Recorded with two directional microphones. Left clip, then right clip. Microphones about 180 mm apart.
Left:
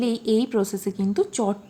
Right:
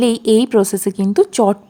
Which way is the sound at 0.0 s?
50° right (ahead or behind).